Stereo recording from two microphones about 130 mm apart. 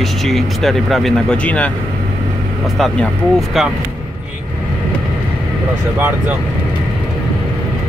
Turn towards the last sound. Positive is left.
turn(degrees=-15)  # may be behind; listen again after turning